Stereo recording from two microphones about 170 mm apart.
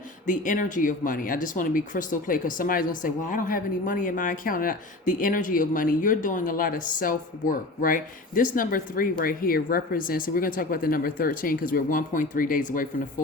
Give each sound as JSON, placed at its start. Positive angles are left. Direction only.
{"t": 0.3, "sound": "speech", "side_deg": 50}